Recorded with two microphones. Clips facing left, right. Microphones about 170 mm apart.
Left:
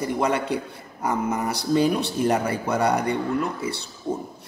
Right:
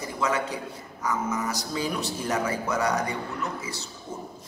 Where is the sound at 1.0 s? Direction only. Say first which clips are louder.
Left 4 dB; 60° left (ahead or behind).